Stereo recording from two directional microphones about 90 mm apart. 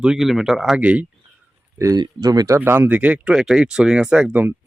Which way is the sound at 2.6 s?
20° right (ahead or behind).